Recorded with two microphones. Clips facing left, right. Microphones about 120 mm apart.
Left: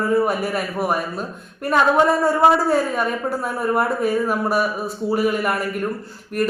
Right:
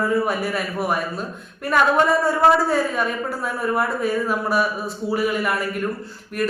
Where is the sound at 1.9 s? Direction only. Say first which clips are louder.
Left 2 dB; 15° left (ahead or behind).